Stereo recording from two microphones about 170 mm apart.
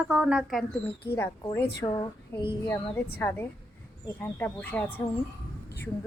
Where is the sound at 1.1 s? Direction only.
15° left (ahead or behind).